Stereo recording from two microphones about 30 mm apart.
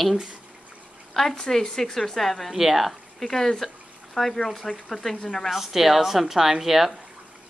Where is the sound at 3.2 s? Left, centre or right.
Centre.